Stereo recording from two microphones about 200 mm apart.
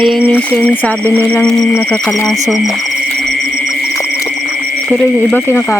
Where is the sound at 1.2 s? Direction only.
5° left (ahead or behind).